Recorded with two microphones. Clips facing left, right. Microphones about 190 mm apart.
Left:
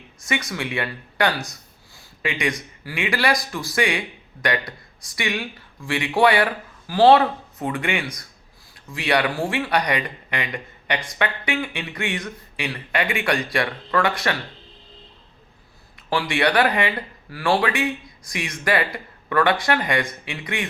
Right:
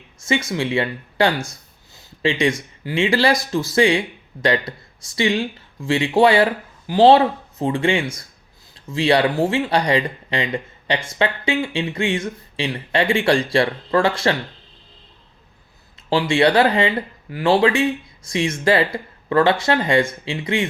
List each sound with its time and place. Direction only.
0.2 s speech: 25° right (ahead or behind)
16.0 s speech: 25° right (ahead or behind)